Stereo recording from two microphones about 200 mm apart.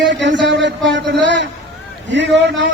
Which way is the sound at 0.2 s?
65° right (ahead or behind).